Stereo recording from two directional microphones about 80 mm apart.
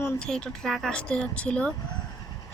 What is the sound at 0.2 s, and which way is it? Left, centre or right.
Speech, centre.